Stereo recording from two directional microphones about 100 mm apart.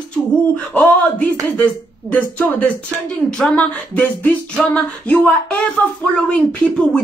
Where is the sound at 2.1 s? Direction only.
10° left (ahead or behind).